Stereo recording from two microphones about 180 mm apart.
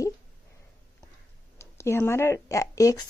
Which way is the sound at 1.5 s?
15° left (ahead or behind).